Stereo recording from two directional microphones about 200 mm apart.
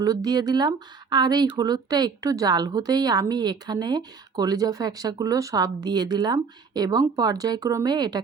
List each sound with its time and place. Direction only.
0.0 s speech: 20° right (ahead or behind)